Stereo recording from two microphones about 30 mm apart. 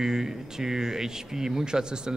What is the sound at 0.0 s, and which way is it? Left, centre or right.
Speech, centre.